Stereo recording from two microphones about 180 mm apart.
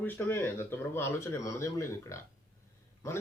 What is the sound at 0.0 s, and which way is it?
A man's voice, 10° left (ahead or behind).